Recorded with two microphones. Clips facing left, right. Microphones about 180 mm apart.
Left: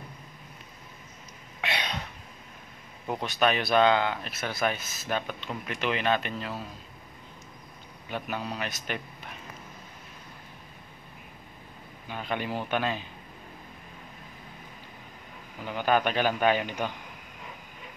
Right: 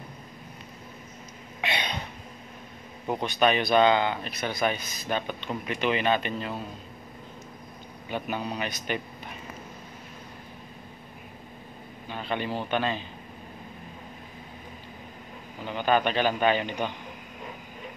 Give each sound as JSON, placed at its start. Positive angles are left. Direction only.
{"t": 1.6, "sound": "a sound", "side_deg": 0}
{"t": 3.1, "sound": "speech", "side_deg": 0}
{"t": 8.1, "sound": "a man's voice", "side_deg": 0}
{"t": 12.1, "sound": "a man's voice", "side_deg": 10}
{"t": 15.6, "sound": "a man's voice", "side_deg": 5}